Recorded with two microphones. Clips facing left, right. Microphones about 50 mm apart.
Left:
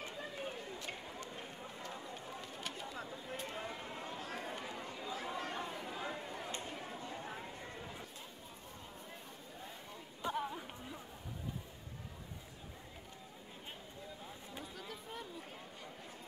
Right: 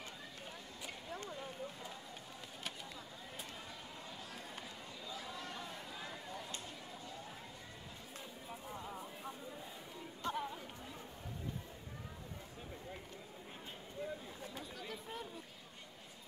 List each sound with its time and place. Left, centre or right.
0.2 s a sound: left
3.4 s chatter: left
10.2 s chatter: centre
14.6 s chatter: centre